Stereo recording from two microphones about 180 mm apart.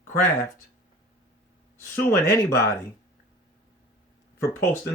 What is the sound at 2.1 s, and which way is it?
Speech, 15° left (ahead or behind).